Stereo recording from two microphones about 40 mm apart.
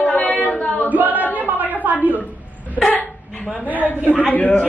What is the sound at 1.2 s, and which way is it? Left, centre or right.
Speech, left.